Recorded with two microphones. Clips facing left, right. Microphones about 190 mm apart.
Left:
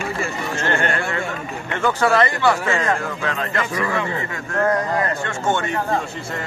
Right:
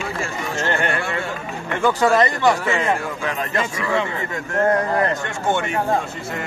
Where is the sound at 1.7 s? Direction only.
15° right (ahead or behind).